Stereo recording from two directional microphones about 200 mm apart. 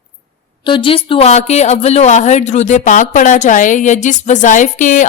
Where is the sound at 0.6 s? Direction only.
25° left (ahead or behind).